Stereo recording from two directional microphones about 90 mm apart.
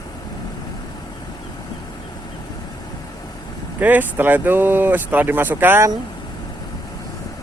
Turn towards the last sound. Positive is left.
turn(degrees=-25)  # may be behind; listen again after turning